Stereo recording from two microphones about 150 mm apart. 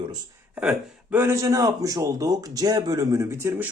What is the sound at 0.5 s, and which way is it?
Speech, 10° right (ahead or behind).